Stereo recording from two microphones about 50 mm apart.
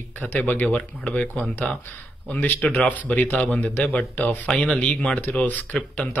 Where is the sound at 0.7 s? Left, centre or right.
Left.